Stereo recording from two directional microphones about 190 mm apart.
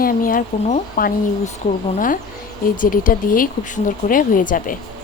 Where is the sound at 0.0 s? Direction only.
45° left (ahead or behind).